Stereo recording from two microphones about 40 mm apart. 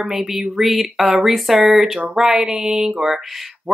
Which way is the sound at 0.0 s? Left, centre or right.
Centre.